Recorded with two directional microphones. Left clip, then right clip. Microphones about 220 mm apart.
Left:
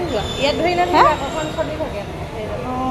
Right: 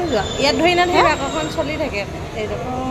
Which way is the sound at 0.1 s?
50° right (ahead or behind).